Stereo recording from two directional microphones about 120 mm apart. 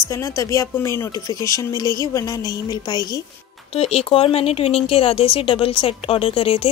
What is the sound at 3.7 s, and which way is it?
Speech, 60° left (ahead or behind).